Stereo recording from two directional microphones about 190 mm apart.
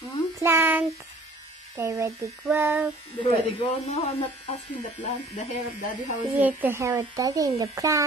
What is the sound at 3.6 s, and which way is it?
Speech, 30° left (ahead or behind).